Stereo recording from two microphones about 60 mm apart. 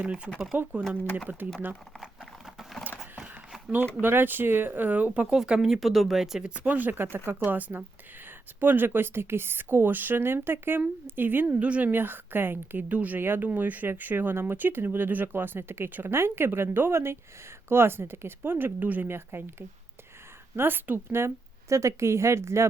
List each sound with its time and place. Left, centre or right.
0.0 s speech: centre
0.5 s speech: right
3.0 s a sound: centre
4.0 s speech: right
5.3 s speech: centre
6.5 s speech: right
11.6 s speech: right
11.9 s speech: right